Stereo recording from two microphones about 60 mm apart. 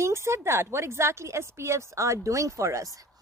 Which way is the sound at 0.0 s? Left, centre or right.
Right.